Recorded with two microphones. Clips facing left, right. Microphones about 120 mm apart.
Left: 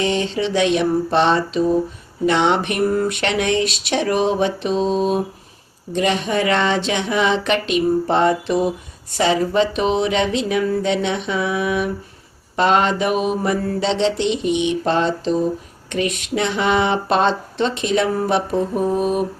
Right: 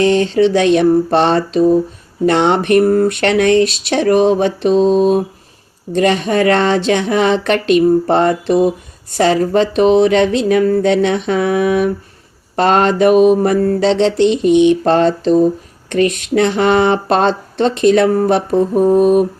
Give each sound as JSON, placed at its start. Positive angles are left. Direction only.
{"t": 0.0, "sound": "speech", "side_deg": -50}
{"t": 14.2, "sound": "speech", "side_deg": -50}
{"t": 14.8, "sound": "a sound", "side_deg": -55}
{"t": 15.9, "sound": "speech", "side_deg": -55}